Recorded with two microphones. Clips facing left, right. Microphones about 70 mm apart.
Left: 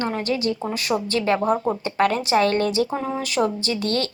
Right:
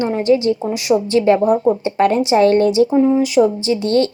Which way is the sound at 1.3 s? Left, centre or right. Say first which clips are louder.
Right 6 dB; left.